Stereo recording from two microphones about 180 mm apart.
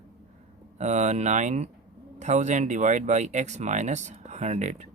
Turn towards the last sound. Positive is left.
turn(degrees=-40)  # may be behind; listen again after turning